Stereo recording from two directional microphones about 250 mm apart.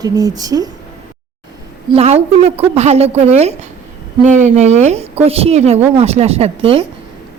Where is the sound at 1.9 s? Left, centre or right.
Right.